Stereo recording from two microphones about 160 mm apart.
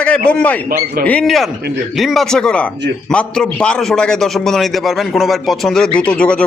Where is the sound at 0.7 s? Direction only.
65° right (ahead or behind).